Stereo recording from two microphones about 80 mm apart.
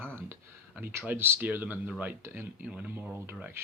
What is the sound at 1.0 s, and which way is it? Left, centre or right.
Speech, right.